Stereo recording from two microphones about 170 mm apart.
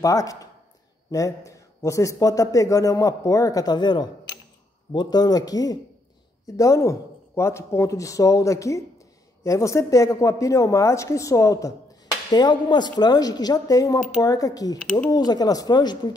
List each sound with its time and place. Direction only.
0.0 s a woman's voice: 20° left (ahead or behind)